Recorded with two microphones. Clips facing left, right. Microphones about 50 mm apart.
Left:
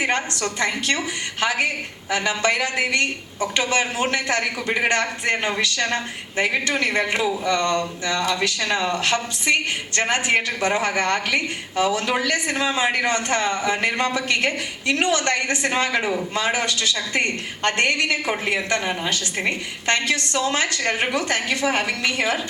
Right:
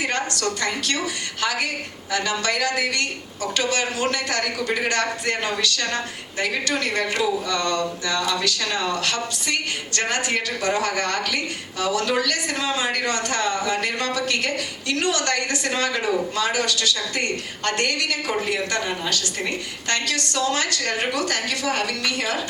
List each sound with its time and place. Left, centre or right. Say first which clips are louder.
0.0 s a woman's voice: left 1 dB; left